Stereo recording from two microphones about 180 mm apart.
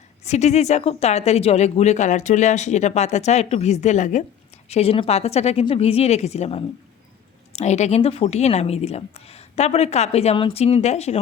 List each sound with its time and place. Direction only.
0.3 s speech: 40° left (ahead or behind)